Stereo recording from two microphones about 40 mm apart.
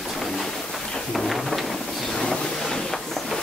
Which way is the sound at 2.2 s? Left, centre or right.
Centre.